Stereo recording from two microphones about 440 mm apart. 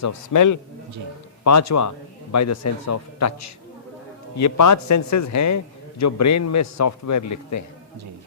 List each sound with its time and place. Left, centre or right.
0.0 s a man's voice: left